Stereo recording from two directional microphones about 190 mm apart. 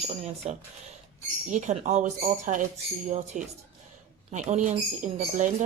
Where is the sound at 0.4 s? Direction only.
35° right (ahead or behind).